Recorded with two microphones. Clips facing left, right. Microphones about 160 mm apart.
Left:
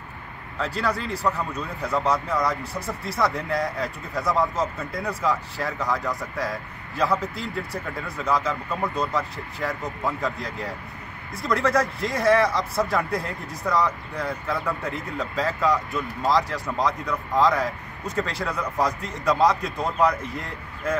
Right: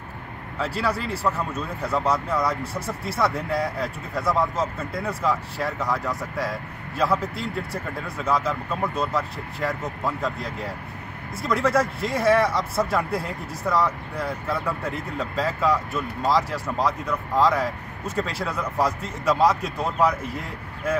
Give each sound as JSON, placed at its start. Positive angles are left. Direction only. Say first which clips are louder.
{"t": 0.6, "sound": "speech", "louder": "right 1 dB", "side_deg": -5}